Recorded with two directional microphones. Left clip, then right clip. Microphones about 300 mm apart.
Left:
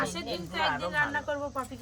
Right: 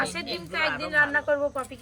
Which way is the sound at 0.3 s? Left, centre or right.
Left.